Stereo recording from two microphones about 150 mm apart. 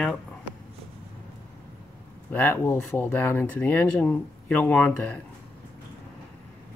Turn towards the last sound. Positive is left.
turn(degrees=10)  # may be behind; listen again after turning